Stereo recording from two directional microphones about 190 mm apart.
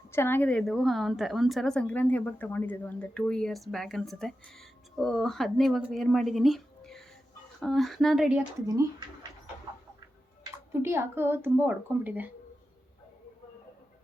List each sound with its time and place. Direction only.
0.1 s a woman's voice: 10° left (ahead or behind)
10.7 s speech: 15° right (ahead or behind)